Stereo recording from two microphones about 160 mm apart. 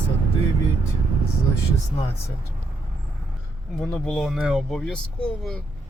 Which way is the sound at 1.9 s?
35° left (ahead or behind).